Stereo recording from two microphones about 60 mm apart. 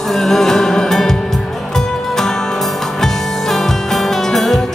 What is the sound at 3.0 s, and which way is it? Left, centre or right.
Music, centre.